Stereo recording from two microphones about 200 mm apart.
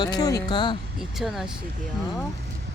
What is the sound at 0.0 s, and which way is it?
Speech, 20° left (ahead or behind).